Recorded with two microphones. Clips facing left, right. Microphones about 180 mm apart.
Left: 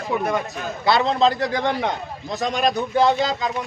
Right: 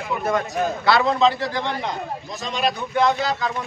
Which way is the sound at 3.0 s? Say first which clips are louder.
Left 1 dB; 30° left (ahead or behind).